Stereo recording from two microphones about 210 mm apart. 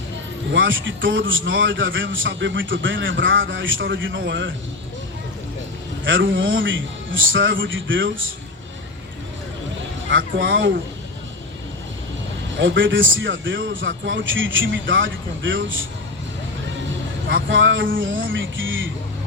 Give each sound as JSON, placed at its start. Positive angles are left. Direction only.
{"t": 0.5, "sound": "a man's voice", "side_deg": -65}
{"t": 6.1, "sound": "a man's voice", "side_deg": -65}
{"t": 10.1, "sound": "speech", "side_deg": -65}
{"t": 12.5, "sound": "a man's voice", "side_deg": -65}
{"t": 17.2, "sound": "a man's voice", "side_deg": -60}